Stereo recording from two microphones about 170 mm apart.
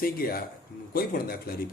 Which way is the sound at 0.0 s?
60° left (ahead or behind).